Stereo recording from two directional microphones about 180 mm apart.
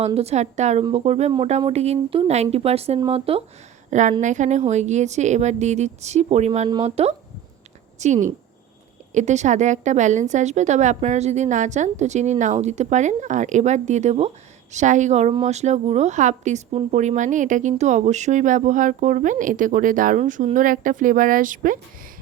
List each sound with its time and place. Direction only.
0.0 s a woman's voice: 35° right (ahead or behind)